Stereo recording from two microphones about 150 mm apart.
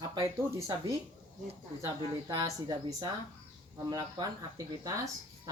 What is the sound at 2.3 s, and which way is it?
Speech, 25° right (ahead or behind).